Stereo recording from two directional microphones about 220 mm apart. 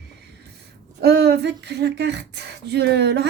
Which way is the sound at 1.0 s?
50° right (ahead or behind).